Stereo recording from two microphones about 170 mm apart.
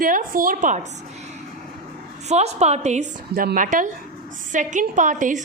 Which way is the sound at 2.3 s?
40° right (ahead or behind).